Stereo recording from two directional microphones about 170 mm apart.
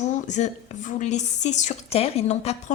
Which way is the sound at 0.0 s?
45° left (ahead or behind).